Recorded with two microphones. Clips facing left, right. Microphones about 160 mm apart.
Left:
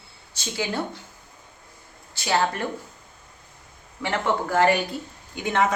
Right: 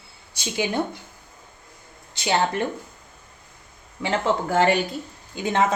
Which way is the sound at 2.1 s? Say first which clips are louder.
Right 1 dB; 20° right (ahead or behind).